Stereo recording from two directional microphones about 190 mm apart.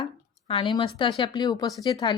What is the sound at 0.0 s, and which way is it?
Speech, 25° left (ahead or behind).